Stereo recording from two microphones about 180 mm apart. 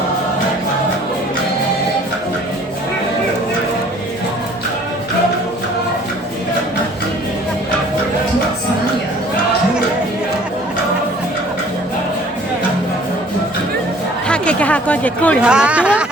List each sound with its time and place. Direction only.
14.3 s chatter: 5° left (ahead or behind)
15.4 s speech: 5° right (ahead or behind)